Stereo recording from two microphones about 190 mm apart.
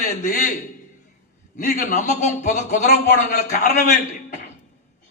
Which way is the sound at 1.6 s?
40° left (ahead or behind).